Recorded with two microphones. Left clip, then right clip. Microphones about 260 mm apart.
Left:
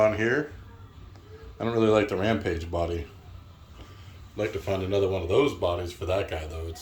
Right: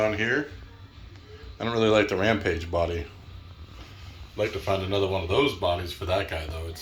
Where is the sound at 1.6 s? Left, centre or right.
Centre.